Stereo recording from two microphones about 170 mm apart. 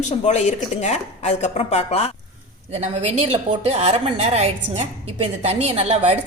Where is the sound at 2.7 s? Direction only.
40° right (ahead or behind).